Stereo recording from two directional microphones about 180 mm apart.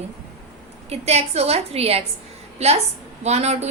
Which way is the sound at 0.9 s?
35° right (ahead or behind).